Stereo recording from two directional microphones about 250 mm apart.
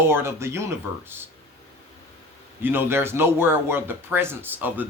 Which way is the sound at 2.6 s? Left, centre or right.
Centre.